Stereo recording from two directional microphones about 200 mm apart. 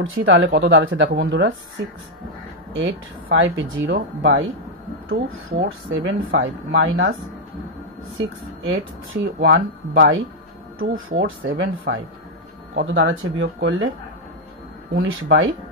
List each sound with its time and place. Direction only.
0.0 s speech: 80° right
2.7 s speech: 70° right (ahead or behind)
5.7 s speech: 65° right (ahead or behind)
15.0 s speech: 70° right (ahead or behind)